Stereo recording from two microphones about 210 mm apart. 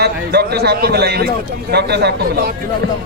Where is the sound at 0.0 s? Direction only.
50° right (ahead or behind).